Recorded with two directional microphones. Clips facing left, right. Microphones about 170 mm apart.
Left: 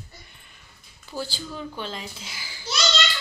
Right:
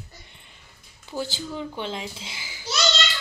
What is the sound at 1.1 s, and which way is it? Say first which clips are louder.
A child's voice: right 2 dB; 20° right (ahead or behind).